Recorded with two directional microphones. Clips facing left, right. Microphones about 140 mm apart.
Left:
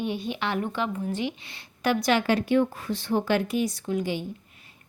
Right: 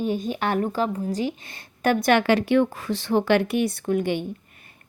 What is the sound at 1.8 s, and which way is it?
A woman's voice, 50° right (ahead or behind).